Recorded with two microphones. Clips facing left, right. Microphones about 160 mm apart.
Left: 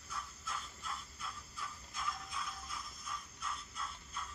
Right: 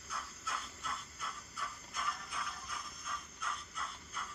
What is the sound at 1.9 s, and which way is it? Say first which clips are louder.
Music: even; 70° right (ahead or behind).